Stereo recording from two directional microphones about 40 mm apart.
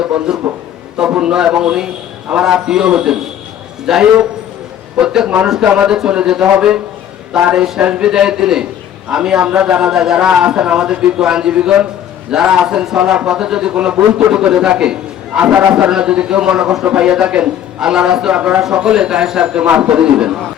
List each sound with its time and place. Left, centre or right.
0.3 s a man's voice: right
17.7 s a man's voice: centre